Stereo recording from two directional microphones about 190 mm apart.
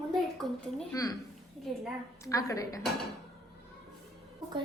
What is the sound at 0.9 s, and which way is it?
Speech, 20° left (ahead or behind).